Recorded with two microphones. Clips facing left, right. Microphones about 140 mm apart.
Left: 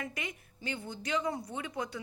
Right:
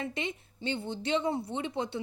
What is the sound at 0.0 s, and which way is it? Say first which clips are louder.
A woman's voice: right 5 dB; 25° right (ahead or behind).